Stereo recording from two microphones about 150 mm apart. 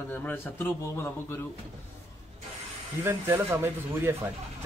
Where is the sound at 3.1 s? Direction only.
15° right (ahead or behind).